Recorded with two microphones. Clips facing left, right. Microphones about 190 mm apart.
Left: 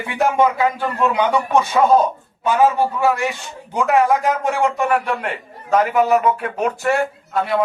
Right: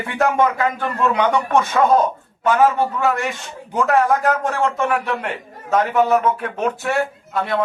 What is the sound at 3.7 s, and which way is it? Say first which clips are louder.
A man's voice: left 1 dB; centre (ahead or behind).